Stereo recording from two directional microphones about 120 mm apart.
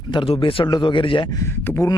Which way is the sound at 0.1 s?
40° left (ahead or behind).